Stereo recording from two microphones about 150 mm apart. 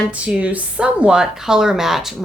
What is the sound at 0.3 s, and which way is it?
Speech, 10° right (ahead or behind).